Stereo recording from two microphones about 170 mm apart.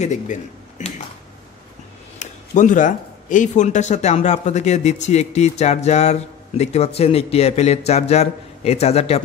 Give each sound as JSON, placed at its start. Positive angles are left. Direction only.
{"t": 0.0, "sound": "speech", "side_deg": 45}
{"t": 2.1, "sound": "speech", "side_deg": 45}